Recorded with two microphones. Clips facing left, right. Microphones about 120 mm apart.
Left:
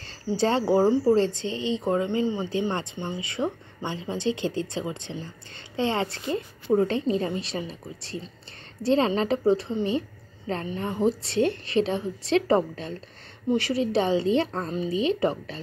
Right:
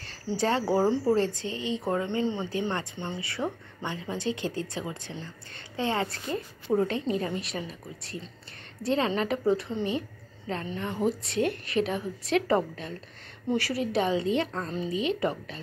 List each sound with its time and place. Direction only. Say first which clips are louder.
0.0 s speech: left 4 dB; 30° left (ahead or behind); by 1.1 s 15° left (ahead or behind)
1.1 s a woman's voice: left 4 dB; 25° left (ahead or behind)